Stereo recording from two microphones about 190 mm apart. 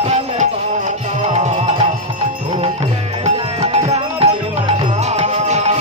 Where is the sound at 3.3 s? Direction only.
30° right (ahead or behind).